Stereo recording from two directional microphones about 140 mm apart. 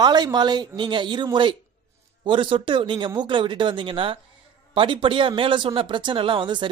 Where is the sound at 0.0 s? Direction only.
30° right (ahead or behind).